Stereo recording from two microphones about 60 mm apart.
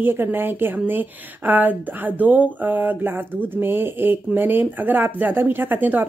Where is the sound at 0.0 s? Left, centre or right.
Right.